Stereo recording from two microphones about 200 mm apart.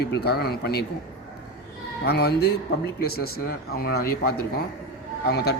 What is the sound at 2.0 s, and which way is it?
Speech, 55° left (ahead or behind).